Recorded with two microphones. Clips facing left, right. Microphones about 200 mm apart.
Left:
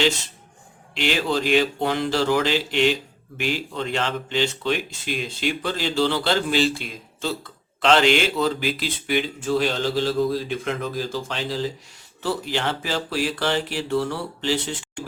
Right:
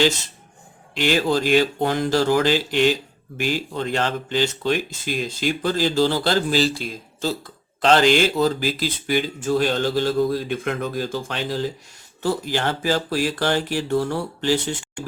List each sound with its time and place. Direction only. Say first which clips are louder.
0.9 s speech: right 3 dB; 40° right (ahead or behind)